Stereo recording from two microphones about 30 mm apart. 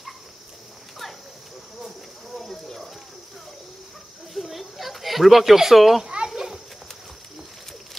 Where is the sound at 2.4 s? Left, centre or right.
Centre.